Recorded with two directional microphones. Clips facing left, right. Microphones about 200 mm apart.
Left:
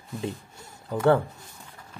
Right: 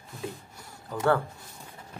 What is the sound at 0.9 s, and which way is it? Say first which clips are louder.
Speech: left 4 dB; 20° left (ahead or behind).